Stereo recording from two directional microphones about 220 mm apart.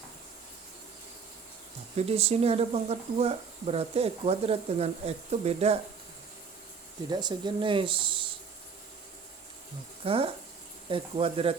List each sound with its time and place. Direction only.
2.0 s speech: 30° right (ahead or behind)
7.1 s speech: 20° right (ahead or behind)
10.0 s speech: 25° right (ahead or behind)